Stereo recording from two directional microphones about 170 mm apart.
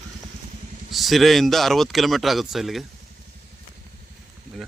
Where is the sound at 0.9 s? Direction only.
Centre (ahead or behind).